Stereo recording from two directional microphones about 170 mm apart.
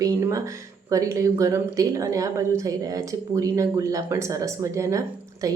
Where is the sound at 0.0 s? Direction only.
20° right (ahead or behind).